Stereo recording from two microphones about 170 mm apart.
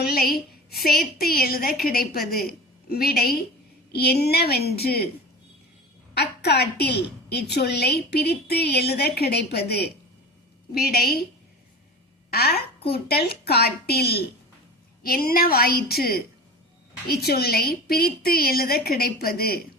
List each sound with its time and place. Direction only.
0.0 s a woman's voice: 60° left (ahead or behind)
6.1 s a woman's voice: 75° left (ahead or behind)
12.3 s a woman's voice: 65° left (ahead or behind)